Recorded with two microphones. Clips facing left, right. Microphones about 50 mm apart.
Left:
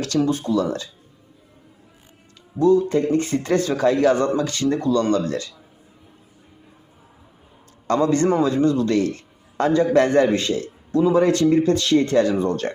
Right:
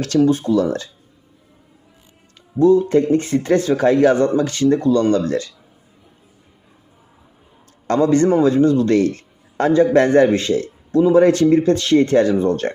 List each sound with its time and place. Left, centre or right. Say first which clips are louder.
0.3 s speech: right 5 dB; right
2.6 s speech: right 4 dB; right
7.9 s a man's voice: right 3 dB; right